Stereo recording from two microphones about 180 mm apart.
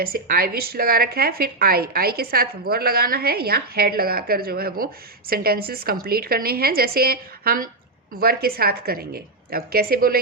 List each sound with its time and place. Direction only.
0.0 s a woman's voice: 55° right (ahead or behind)